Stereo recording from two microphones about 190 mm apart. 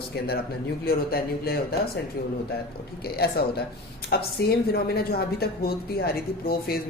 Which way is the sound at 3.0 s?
55° left (ahead or behind).